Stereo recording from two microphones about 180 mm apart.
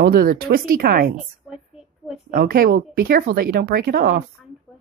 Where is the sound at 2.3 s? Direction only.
55° right (ahead or behind).